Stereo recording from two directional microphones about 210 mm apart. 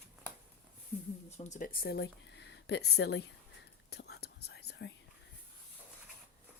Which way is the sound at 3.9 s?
50° left (ahead or behind).